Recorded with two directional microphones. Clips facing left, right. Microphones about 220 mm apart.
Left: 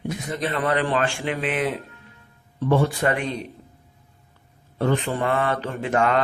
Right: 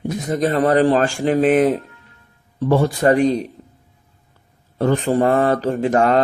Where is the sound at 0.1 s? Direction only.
40° right (ahead or behind).